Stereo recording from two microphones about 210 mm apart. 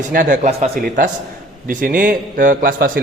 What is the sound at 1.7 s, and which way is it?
A man's voice, 40° right (ahead or behind).